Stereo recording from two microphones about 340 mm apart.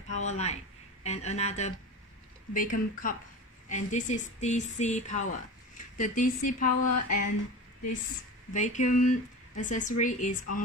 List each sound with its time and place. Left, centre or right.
0.1 s speech: centre
6.7 s speech: left
8.5 s speech: left